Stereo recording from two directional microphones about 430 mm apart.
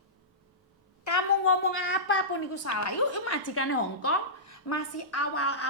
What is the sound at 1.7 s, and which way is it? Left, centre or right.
A woman's voice, left.